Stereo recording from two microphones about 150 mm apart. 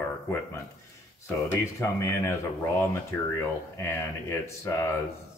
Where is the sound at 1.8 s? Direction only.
20° left (ahead or behind).